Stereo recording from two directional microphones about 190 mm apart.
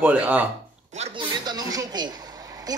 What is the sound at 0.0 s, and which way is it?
Speech, 10° right (ahead or behind).